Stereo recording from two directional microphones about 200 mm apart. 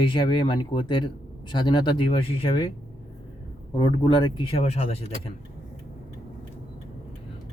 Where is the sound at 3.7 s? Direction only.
20° left (ahead or behind).